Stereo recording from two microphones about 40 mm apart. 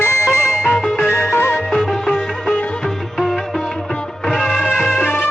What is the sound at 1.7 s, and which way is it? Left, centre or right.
Music, centre.